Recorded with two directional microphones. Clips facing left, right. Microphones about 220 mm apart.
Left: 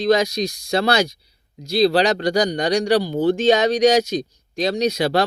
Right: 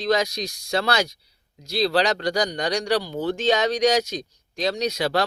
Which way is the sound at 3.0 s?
35° left (ahead or behind).